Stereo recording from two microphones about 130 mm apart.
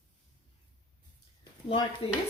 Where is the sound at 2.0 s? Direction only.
50° left (ahead or behind).